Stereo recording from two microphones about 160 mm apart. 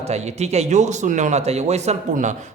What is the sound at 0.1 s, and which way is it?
Speech, 40° right (ahead or behind).